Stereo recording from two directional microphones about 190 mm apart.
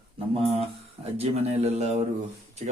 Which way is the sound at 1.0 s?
35° right (ahead or behind).